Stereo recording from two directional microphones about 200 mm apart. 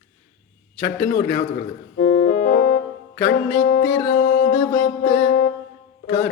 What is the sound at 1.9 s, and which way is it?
Keyboard, 50° left (ahead or behind).